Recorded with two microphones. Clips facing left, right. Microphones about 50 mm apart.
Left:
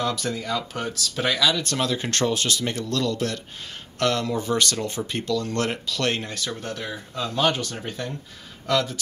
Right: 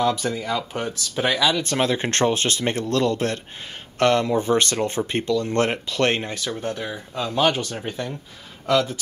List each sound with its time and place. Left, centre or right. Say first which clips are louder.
0.0 s speech: right 4 dB; centre